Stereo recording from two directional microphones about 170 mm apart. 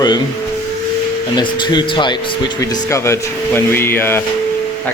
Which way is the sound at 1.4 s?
25° left (ahead or behind).